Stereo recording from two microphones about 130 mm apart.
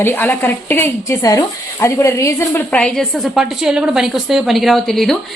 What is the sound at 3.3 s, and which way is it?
A woman's voice, 5° right (ahead or behind).